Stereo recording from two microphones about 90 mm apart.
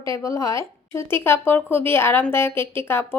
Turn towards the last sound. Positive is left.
turn(degrees=25)  # may be behind; listen again after turning